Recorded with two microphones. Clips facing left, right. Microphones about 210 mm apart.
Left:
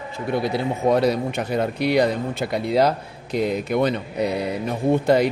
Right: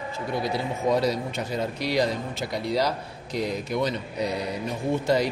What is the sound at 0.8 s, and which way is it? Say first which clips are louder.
Speech: left 5 dB; 60° left (ahead or behind).